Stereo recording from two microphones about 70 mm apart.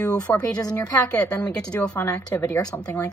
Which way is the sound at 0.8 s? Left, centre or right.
Left.